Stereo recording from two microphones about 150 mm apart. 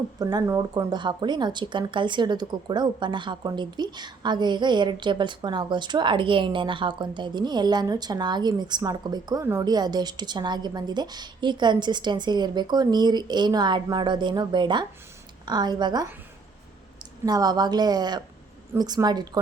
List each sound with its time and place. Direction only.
0.2 s speech: 25° right (ahead or behind)
17.2 s speech: 25° right (ahead or behind)